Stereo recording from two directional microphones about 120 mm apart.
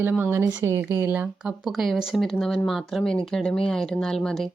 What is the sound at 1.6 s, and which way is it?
Speech, centre (ahead or behind).